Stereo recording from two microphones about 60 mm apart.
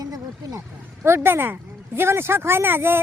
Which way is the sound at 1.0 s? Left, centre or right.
Right.